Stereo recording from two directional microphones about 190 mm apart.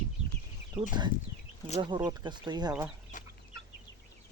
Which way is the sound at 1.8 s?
20° right (ahead or behind).